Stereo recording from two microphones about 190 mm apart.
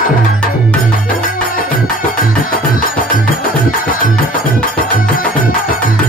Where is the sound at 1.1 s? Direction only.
45° left (ahead or behind).